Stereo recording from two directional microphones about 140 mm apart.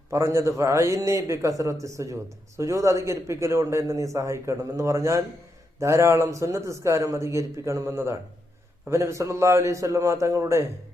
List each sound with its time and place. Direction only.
0.1 s a man's voice: 20° right (ahead or behind)